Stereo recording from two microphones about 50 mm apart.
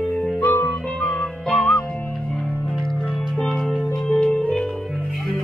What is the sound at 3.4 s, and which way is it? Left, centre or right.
Music, centre.